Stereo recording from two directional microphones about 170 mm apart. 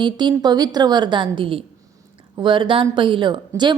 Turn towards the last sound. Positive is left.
turn(degrees=-25)  # may be behind; listen again after turning